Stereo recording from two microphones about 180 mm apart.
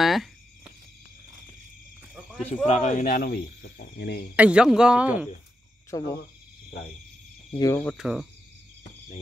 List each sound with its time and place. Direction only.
0.0 s a sound: centre (ahead or behind)
2.6 s speech: 40° left (ahead or behind); by 4.3 s 65° left (ahead or behind)
4.4 s speech: 5° right (ahead or behind)
5.9 s speech: 20° left (ahead or behind)
7.5 s speech: 20° left (ahead or behind)
7.8 s speech: centre (ahead or behind)